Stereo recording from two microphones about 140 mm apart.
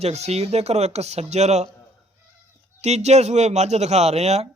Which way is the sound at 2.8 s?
50° right (ahead or behind).